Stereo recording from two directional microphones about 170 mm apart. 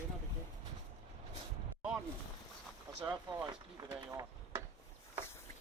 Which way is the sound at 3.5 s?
20° right (ahead or behind).